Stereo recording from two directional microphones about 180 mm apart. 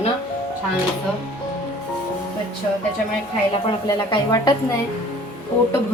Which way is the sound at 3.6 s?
25° left (ahead or behind).